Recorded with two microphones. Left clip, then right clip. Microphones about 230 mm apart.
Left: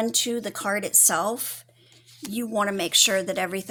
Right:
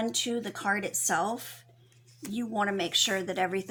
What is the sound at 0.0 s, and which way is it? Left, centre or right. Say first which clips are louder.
A woman's voice: left 5 dB; left.